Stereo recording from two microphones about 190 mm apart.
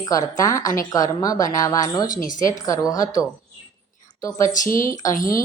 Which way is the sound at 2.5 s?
15° left (ahead or behind).